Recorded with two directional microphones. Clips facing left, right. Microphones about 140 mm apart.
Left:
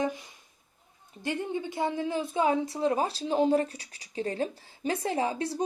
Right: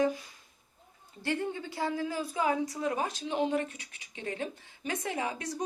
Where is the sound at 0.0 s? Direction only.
20° left (ahead or behind).